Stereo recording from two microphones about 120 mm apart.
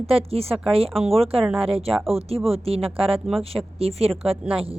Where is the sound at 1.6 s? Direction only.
55° right (ahead or behind).